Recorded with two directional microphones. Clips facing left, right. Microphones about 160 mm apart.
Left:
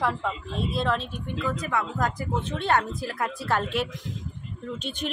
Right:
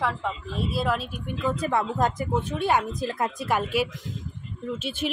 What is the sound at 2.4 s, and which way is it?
A woman's voice, 10° right (ahead or behind).